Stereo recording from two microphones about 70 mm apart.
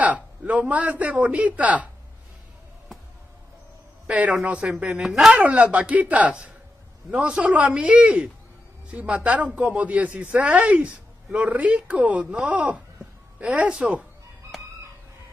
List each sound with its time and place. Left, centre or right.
0.0 s speech: right
4.1 s a woman's voice: right; by 5.3 s centre
5.3 s a woman's voice: centre